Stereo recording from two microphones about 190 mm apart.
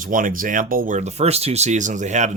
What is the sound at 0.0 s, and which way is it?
Speech, 45° right (ahead or behind).